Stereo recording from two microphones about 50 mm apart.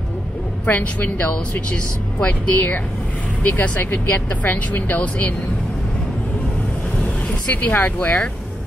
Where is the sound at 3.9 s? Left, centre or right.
Left.